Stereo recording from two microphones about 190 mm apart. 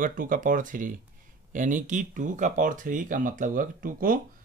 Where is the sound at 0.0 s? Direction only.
45° right (ahead or behind).